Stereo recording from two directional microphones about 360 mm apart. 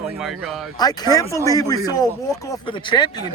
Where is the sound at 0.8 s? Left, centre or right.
Centre.